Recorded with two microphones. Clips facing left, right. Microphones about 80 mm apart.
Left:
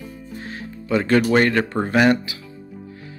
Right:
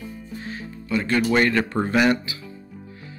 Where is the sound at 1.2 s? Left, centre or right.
Left.